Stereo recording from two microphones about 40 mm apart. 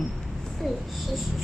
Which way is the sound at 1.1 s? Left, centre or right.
Centre.